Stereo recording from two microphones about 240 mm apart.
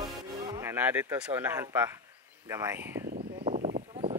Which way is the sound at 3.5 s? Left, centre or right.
Right.